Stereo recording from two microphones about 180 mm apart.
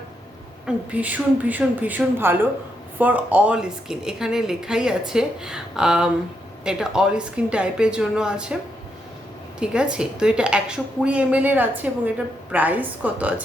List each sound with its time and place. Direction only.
0.6 s a woman's voice: 10° right (ahead or behind)
9.6 s a woman's voice: 5° right (ahead or behind)